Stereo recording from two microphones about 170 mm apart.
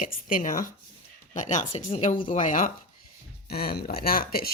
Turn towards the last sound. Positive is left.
turn(degrees=60)  # may be behind; listen again after turning